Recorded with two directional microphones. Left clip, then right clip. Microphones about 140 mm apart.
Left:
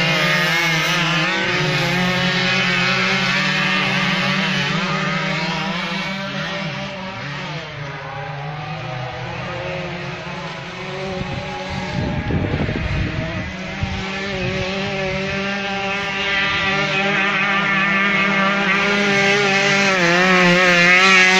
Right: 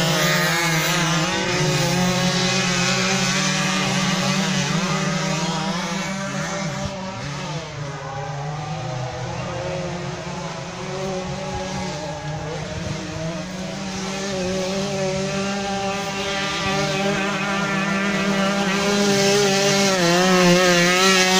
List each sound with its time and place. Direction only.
0.0 s vehicle: 15° right (ahead or behind)
14.4 s vehicle: 90° right; by 19.0 s 55° right (ahead or behind)
19.1 s chainsaw: 60° right (ahead or behind)